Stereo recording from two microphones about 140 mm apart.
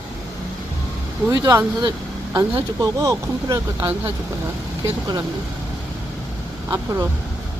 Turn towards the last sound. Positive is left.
turn(degrees=-20)  # may be behind; listen again after turning